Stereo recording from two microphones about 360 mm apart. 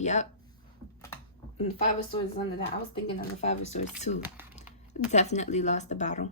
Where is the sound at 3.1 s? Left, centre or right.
Centre.